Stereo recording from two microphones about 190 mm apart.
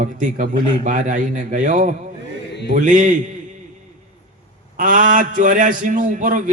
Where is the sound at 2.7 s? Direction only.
40° right (ahead or behind).